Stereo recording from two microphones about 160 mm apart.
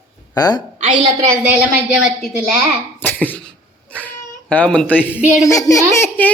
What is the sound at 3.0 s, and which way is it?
Cough, 10° left (ahead or behind).